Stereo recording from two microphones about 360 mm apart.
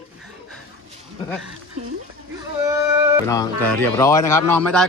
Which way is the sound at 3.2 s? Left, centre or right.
Centre.